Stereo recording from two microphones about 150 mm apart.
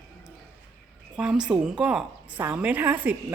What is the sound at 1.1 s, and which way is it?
A woman's voice, 5° right (ahead or behind).